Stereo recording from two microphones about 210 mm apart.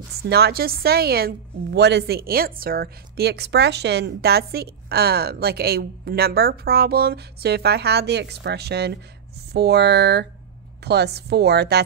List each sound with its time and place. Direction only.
0.2 s a woman's voice: 50° right (ahead or behind)